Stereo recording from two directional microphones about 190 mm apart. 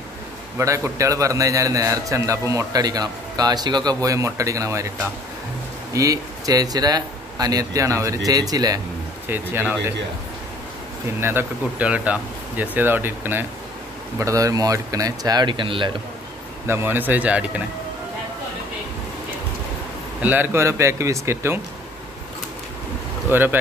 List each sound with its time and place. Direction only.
0.6 s a man's voice: 15° right (ahead or behind)
5.9 s a man's voice: 20° right (ahead or behind)
11.1 s a man's voice: 10° right (ahead or behind)
16.6 s a man's voice: 10° right (ahead or behind)
20.2 s a man's voice: 10° right (ahead or behind)
23.3 s a man's voice: 10° right (ahead or behind)